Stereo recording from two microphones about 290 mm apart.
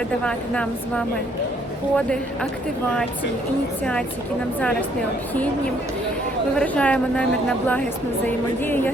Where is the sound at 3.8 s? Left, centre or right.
Centre.